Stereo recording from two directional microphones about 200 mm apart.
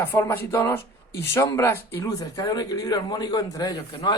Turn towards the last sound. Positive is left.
turn(degrees=20)  # may be behind; listen again after turning